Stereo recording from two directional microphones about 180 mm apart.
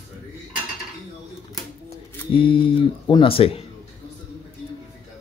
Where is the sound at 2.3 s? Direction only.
30° left (ahead or behind).